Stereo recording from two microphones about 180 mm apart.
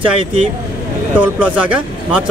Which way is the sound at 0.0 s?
30° right (ahead or behind).